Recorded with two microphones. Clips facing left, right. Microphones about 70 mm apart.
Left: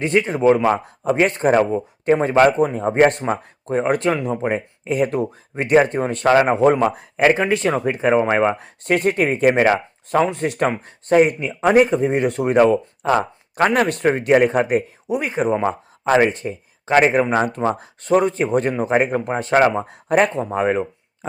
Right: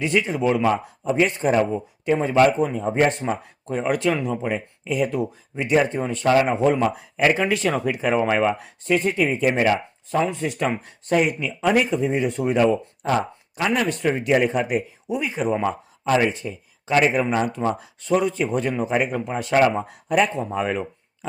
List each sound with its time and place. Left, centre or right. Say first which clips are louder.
0.0 s speech: left 5 dB; left
1.0 s speech: left 4 dB; left
6.8 s speech: left 4 dB; left
8.8 s speech: left 3 dB; left
10.7 s speech: left 4 dB; left
13.0 s speech: left 4 dB; left
13.6 s speech: left 5 dB; left
20.1 s speech: left 3 dB; left